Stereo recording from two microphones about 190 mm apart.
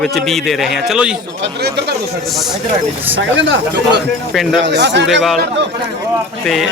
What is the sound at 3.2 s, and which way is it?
Speech, 75° right (ahead or behind).